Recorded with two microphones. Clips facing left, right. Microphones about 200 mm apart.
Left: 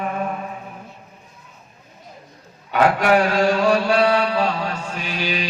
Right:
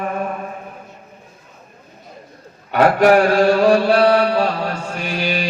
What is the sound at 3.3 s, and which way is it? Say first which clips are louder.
Chant: right 4 dB; 55° right (ahead or behind).